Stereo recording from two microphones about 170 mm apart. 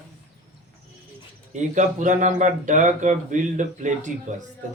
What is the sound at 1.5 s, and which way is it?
A man's voice, 45° right (ahead or behind).